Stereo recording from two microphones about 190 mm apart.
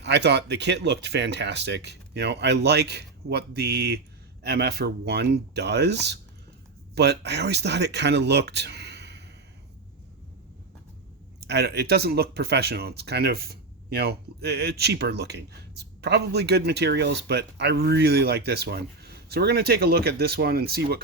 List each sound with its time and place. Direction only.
0.0 s speech: 60° right (ahead or behind)
11.3 s speech: 60° right (ahead or behind)